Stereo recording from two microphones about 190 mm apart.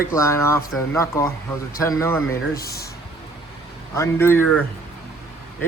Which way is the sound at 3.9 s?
15° left (ahead or behind).